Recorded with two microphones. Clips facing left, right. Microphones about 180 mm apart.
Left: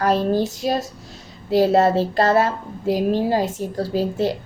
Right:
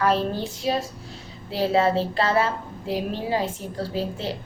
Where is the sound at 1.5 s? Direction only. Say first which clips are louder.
Left 5 dB; 45° left (ahead or behind).